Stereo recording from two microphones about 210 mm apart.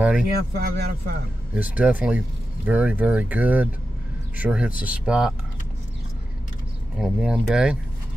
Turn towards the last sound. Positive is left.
turn(degrees=-5)  # may be behind; listen again after turning